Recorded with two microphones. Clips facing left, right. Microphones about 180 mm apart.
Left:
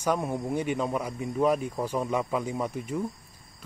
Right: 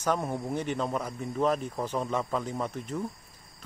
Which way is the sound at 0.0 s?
10° left (ahead or behind).